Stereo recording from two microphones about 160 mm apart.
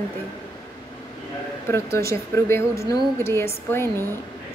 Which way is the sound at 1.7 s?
15° left (ahead or behind).